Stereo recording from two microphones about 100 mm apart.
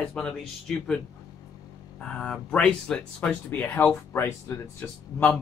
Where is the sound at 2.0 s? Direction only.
10° left (ahead or behind).